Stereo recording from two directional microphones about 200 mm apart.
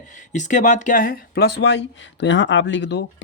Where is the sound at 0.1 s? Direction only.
40° left (ahead or behind).